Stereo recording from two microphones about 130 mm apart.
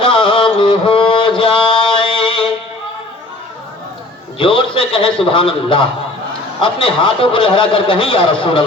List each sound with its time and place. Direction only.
0.0 s mantra: 40° left (ahead or behind)
4.4 s a man's voice: 45° left (ahead or behind)